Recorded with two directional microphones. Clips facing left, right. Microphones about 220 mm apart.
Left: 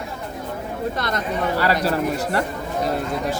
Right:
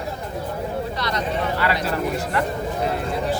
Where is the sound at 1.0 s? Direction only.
50° left (ahead or behind).